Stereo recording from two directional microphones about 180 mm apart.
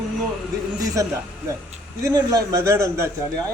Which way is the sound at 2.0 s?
20° right (ahead or behind).